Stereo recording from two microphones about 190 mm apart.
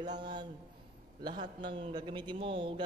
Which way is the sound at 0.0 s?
20° right (ahead or behind).